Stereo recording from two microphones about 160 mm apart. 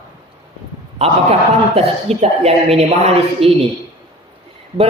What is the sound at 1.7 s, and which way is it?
A man's voice, 40° right (ahead or behind).